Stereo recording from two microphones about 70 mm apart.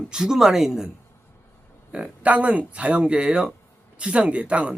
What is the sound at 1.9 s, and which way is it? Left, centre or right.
A man's voice, centre.